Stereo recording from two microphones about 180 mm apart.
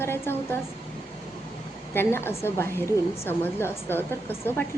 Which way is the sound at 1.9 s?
15° left (ahead or behind).